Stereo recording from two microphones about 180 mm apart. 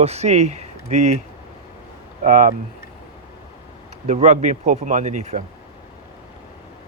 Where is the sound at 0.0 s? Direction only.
35° right (ahead or behind).